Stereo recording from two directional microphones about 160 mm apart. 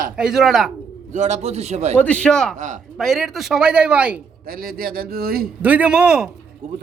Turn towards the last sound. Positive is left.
turn(degrees=-5)  # may be behind; listen again after turning